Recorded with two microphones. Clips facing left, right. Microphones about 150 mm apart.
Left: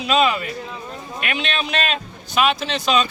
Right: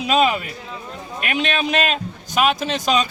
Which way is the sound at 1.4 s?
45° right (ahead or behind).